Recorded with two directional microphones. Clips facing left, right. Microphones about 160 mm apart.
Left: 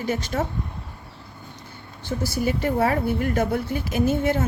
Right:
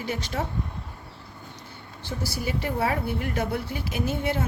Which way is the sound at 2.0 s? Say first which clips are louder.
Left 6 dB; 50° left (ahead or behind).